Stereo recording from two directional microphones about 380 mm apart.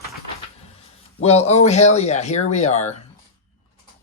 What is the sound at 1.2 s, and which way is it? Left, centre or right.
Speech, centre.